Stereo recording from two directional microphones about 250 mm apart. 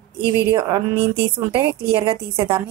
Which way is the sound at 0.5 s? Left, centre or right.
Centre.